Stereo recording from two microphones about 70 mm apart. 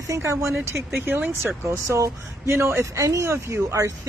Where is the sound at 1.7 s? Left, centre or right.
Right.